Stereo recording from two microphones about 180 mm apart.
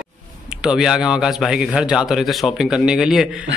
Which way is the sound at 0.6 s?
5° right (ahead or behind).